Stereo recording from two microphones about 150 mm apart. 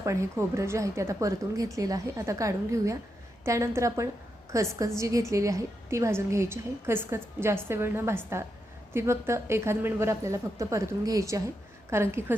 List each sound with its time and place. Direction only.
0.0 s a woman's voice: 20° right (ahead or behind)